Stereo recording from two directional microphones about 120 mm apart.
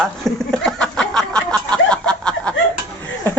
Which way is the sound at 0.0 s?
5° left (ahead or behind).